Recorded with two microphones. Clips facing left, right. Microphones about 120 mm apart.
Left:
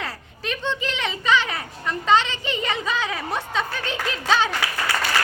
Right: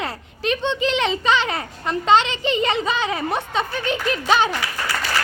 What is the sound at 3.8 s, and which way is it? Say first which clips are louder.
Speech: right 5 dB; 65° right (ahead or behind).